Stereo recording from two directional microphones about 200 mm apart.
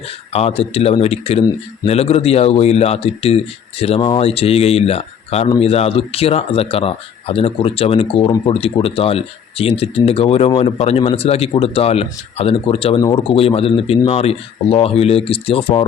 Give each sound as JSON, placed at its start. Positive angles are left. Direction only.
{"t": 0.3, "sound": "speech", "side_deg": 30}